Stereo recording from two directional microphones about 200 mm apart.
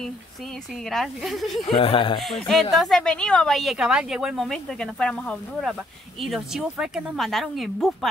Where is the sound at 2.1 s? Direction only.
Centre (ahead or behind).